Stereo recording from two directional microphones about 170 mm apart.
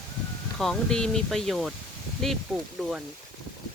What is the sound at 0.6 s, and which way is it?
Speech, 5° left (ahead or behind).